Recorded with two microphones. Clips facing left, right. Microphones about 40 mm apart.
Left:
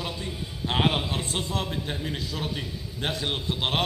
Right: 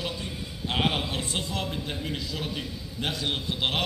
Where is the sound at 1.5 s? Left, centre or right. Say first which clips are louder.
Left 2 dB; left.